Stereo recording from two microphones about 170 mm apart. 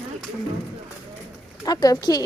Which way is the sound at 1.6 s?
20° left (ahead or behind).